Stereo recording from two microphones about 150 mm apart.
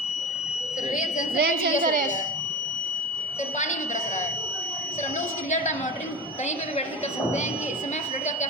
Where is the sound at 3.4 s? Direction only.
55° left (ahead or behind).